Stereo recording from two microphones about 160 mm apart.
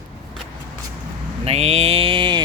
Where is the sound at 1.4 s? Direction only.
40° right (ahead or behind).